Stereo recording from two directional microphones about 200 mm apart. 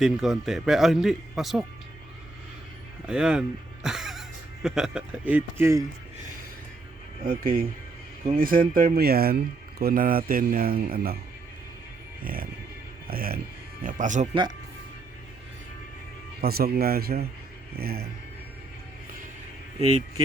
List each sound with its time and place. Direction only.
0.0 s a man's voice: 5° right (ahead or behind)
3.1 s a man's voice: 5° right (ahead or behind)
7.3 s speech: 45° right (ahead or behind)
12.2 s speech: 45° right (ahead or behind)
16.4 s speech: 50° right (ahead or behind)
19.8 s speech: 25° right (ahead or behind)